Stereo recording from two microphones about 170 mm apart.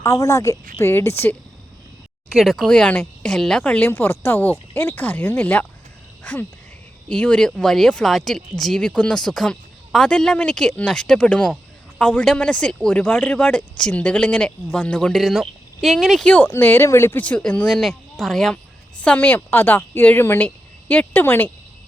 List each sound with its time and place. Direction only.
0.0 s a woman's voice: 20° left (ahead or behind)
2.3 s a woman's voice: centre (ahead or behind)
7.1 s a woman's voice: 5° left (ahead or behind)